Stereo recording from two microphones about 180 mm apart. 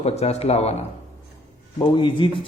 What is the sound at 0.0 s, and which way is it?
Speech, 35° left (ahead or behind).